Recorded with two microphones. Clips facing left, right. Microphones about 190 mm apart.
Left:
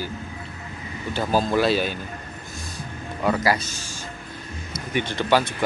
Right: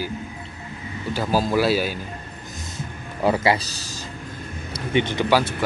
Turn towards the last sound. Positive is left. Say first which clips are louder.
# right 1 dB
turn(degrees=-10)  # may be behind; listen again after turning